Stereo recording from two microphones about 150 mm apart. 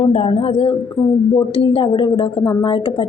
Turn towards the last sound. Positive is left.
turn(degrees=35)  # may be behind; listen again after turning